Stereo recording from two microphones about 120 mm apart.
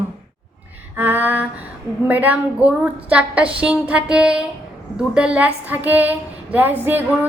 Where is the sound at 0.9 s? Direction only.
15° right (ahead or behind).